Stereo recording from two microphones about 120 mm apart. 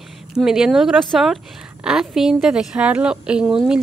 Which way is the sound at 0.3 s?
5° right (ahead or behind).